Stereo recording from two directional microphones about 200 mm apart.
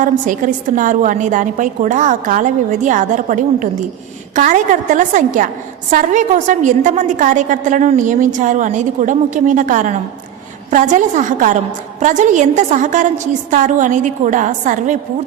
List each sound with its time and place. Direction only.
0.0 s a woman's voice: 40° right (ahead or behind)